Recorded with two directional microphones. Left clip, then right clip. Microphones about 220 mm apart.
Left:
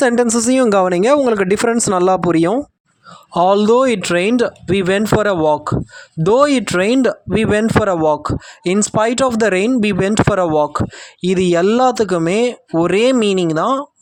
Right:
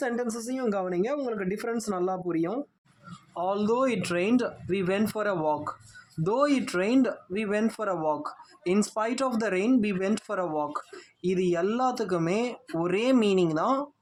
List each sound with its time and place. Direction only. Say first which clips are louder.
0.0 s speech: left 17 dB; 45° left (ahead or behind)